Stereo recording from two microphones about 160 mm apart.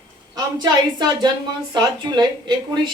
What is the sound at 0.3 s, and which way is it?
A woman's voice, 25° right (ahead or behind).